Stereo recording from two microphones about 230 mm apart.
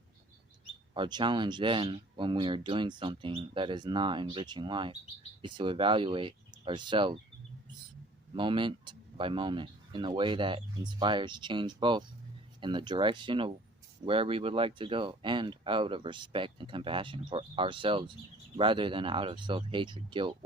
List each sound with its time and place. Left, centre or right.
0.9 s speech: centre
8.4 s speech: right